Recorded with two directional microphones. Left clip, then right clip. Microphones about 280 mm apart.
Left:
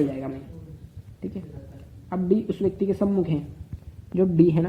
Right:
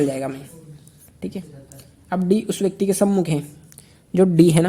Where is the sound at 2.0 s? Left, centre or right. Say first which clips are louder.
Right 3 dB; right.